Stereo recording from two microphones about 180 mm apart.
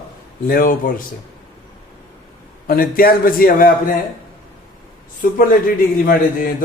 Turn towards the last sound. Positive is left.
turn(degrees=55)  # may be behind; listen again after turning